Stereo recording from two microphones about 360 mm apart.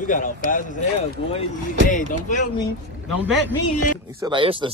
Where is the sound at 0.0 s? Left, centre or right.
Left.